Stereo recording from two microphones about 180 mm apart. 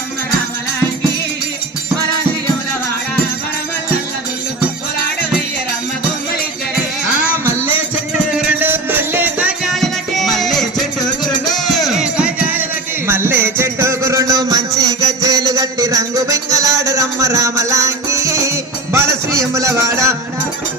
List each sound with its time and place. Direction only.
8.5 s music: 10° right (ahead or behind)